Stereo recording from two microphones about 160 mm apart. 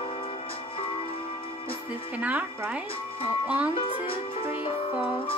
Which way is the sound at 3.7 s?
35° left (ahead or behind).